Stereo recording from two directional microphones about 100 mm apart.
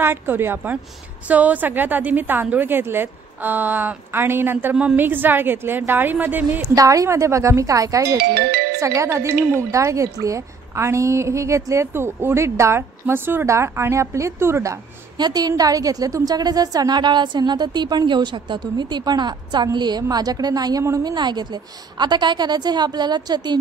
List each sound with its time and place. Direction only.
0.0 s a woman's voice: 25° right (ahead or behind)
6.7 s a woman's voice: 35° right (ahead or behind)
15.1 s a woman's voice: 45° right (ahead or behind)